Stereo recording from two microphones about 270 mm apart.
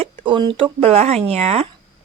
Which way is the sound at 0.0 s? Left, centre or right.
Centre.